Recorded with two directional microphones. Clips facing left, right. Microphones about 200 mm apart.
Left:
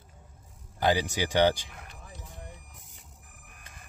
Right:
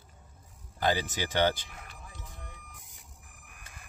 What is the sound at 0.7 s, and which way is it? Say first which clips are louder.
Speech: left 3 dB; 15° left (ahead or behind).